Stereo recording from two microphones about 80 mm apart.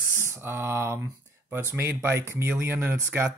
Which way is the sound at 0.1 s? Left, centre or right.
Right.